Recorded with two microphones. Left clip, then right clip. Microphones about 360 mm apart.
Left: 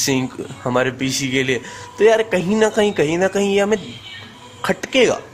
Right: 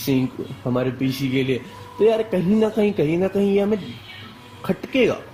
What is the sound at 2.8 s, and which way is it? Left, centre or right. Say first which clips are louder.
Speech: left 3 dB; left.